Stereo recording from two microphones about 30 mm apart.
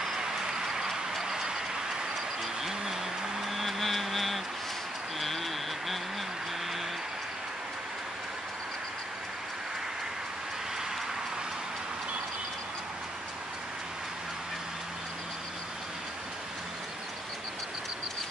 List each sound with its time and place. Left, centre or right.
0.2 s vehicle: right
2.6 s a sound: centre
3.4 s vehicle: centre